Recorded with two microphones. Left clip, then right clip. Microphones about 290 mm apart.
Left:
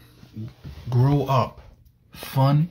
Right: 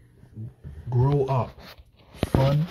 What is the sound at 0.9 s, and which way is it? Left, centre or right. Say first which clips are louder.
Speech: left 2 dB; centre.